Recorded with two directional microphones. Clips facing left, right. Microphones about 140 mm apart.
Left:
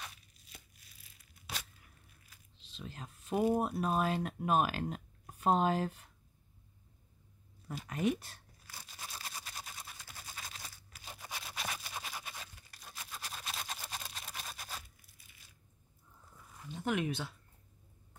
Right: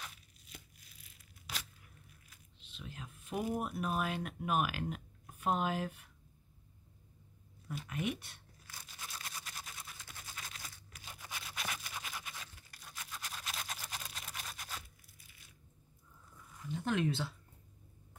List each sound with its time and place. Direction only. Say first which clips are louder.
2.6 s speech: left 2 dB; 35° left (ahead or behind)
7.6 s speech: left 5 dB; 35° left (ahead or behind)
9.0 s camera: left 1 dB; 30° left (ahead or behind)
12.9 s a sound: left 1 dB; 30° left (ahead or behind)
16.6 s speech: right 1 dB; 20° left (ahead or behind)